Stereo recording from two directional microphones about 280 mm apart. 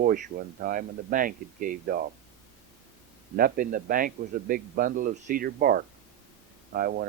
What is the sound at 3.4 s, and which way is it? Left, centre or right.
Speech, right.